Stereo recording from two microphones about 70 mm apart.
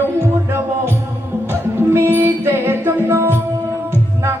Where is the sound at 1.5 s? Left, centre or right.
Right.